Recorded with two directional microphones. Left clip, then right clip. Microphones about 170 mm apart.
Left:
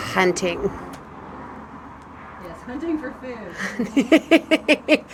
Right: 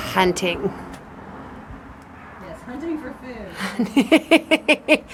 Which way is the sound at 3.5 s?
20° right (ahead or behind).